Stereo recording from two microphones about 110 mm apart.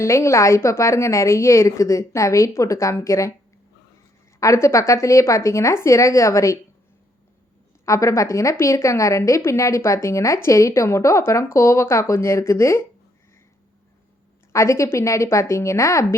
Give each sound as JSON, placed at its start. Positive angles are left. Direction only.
{"t": 0.0, "sound": "a woman's voice", "side_deg": 25}
{"t": 4.4, "sound": "a woman's voice", "side_deg": 25}
{"t": 7.9, "sound": "a woman's voice", "side_deg": 25}
{"t": 14.5, "sound": "a woman's voice", "side_deg": 25}